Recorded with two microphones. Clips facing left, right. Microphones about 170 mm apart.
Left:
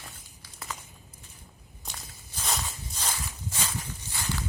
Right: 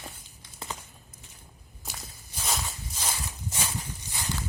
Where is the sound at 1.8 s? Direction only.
5° right (ahead or behind).